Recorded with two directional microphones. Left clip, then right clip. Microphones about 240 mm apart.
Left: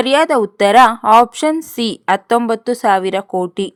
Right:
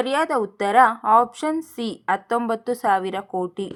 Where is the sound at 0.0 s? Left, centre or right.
Left.